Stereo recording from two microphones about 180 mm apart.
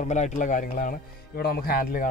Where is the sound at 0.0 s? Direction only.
40° left (ahead or behind).